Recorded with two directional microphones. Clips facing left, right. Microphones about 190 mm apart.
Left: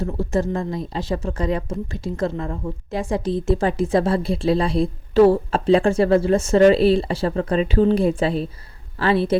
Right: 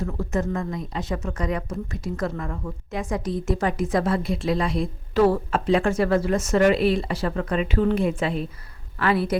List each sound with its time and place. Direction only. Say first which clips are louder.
0.0 s a woman's voice: left 4 dB; 30° left (ahead or behind)